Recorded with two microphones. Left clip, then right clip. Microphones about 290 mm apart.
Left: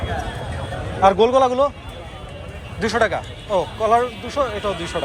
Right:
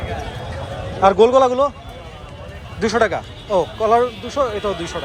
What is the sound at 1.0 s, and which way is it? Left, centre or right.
Speech, centre.